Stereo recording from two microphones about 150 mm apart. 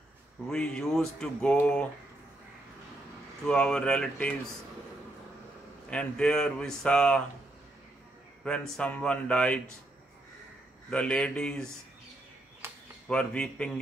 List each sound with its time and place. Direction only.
0.5 s speech: 5° left (ahead or behind)
3.4 s speech: 5° left (ahead or behind)
5.9 s speech: 5° left (ahead or behind)
8.5 s speech: 5° left (ahead or behind)
10.9 s speech: 5° left (ahead or behind)
12.6 s a sound: 15° right (ahead or behind)
13.1 s speech: 5° left (ahead or behind)